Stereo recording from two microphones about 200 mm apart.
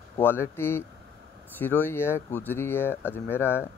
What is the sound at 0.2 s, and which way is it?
Speech, 10° left (ahead or behind).